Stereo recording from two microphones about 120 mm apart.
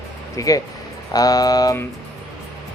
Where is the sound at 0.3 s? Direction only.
30° left (ahead or behind).